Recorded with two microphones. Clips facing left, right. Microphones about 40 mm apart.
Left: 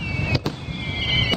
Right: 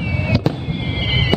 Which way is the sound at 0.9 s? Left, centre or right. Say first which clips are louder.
Right 1 dB; centre.